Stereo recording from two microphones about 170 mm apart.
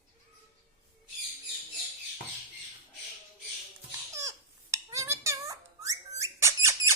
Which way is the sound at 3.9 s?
20° right (ahead or behind).